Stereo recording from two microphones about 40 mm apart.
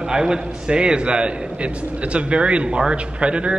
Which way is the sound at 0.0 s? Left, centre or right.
Centre.